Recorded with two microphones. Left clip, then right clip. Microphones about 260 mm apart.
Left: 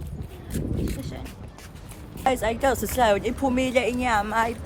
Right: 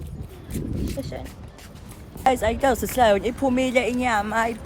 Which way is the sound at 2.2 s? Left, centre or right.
Right.